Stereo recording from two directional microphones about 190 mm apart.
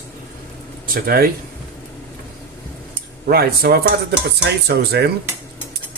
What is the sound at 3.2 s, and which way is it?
Speech, 55° right (ahead or behind).